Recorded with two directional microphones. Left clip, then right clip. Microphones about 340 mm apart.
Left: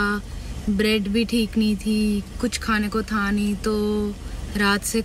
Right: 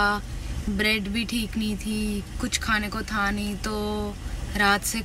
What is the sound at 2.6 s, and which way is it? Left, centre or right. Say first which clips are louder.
Speech: left 1 dB; right.